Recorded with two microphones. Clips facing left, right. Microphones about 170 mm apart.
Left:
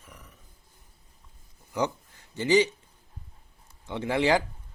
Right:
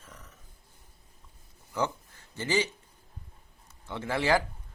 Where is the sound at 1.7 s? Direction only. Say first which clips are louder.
Left 2 dB; 15° left (ahead or behind).